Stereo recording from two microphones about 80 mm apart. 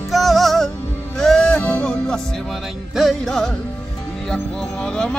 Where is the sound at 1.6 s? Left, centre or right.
Left.